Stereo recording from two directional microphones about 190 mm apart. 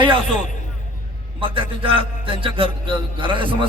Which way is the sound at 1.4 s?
30° right (ahead or behind).